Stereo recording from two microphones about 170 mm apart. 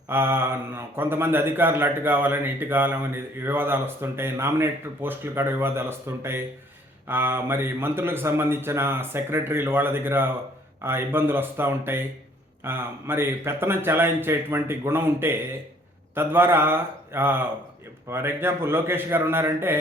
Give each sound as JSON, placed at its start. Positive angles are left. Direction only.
{"t": 0.1, "sound": "speech", "side_deg": -15}